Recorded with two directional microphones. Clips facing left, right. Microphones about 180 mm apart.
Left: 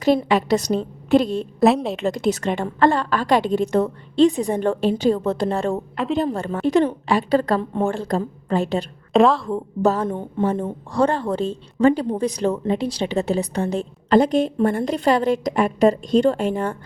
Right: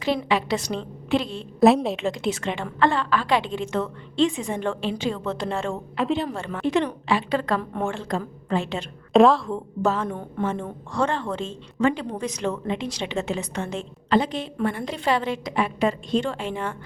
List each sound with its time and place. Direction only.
0.3 s a woman's voice: 40° left (ahead or behind)
1.5 s a woman's voice: centre (ahead or behind)
2.0 s a woman's voice: 40° left (ahead or behind)
9.1 s a woman's voice: centre (ahead or behind)
9.8 s a woman's voice: 40° left (ahead or behind)
10.1 s speech: 20° left (ahead or behind)
10.4 s a woman's voice: 40° left (ahead or behind)